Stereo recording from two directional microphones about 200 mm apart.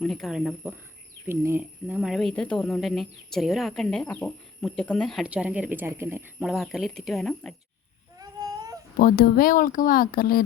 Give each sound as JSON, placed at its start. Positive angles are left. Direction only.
{"t": 0.0, "sound": "speech", "side_deg": 0}
{"t": 6.4, "sound": "speech", "side_deg": 0}
{"t": 8.2, "sound": "baby cry", "side_deg": -20}
{"t": 9.0, "sound": "speech", "side_deg": 45}